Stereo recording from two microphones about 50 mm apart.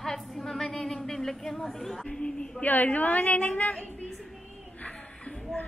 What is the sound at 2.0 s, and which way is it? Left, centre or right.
Speech, centre.